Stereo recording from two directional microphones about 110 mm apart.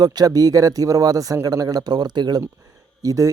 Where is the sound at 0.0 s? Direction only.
35° right (ahead or behind).